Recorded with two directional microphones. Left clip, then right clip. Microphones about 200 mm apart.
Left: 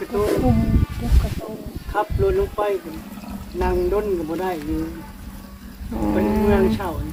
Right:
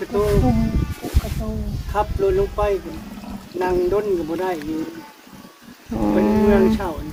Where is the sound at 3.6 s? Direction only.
25° right (ahead or behind).